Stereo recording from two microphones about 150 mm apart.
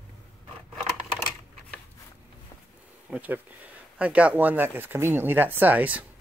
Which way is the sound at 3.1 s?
10° right (ahead or behind).